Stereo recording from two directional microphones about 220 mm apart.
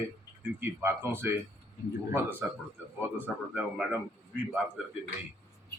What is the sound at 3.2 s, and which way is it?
Speech, 5° right (ahead or behind).